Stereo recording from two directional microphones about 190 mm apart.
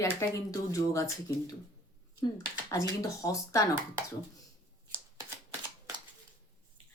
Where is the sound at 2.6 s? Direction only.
15° left (ahead or behind).